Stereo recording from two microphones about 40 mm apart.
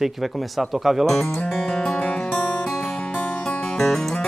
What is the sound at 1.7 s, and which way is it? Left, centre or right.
Music, left.